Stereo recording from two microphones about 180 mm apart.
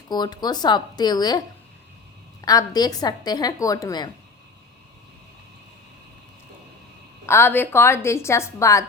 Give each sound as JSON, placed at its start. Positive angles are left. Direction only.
{"t": 0.1, "sound": "a woman's voice", "side_deg": 20}
{"t": 2.4, "sound": "a woman's voice", "side_deg": 20}
{"t": 7.3, "sound": "a woman's voice", "side_deg": 10}